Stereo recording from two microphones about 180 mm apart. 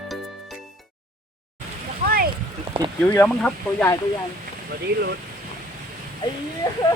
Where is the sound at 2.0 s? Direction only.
55° right (ahead or behind).